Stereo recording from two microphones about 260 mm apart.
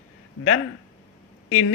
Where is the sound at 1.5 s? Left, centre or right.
Left.